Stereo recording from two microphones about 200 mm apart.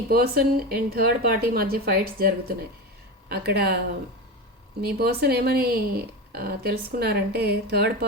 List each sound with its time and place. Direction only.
0.1 s a woman's voice: 50° right (ahead or behind)
4.8 s a woman's voice: 50° right (ahead or behind)